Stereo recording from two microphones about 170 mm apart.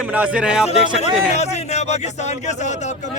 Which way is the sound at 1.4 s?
40° left (ahead or behind).